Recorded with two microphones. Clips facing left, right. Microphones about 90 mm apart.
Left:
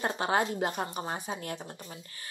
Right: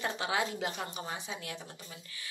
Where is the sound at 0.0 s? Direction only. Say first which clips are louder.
Left 4 dB; 45° left (ahead or behind).